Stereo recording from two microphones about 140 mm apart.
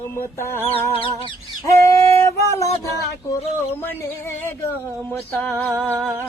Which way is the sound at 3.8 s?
15° left (ahead or behind).